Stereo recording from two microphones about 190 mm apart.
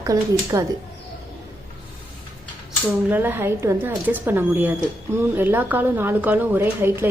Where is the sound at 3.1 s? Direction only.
10° right (ahead or behind).